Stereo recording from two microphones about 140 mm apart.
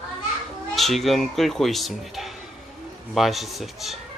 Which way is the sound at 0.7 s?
Centre (ahead or behind).